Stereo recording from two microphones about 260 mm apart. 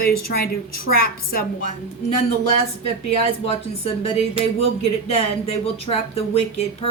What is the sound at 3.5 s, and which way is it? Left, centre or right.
A woman's voice, left.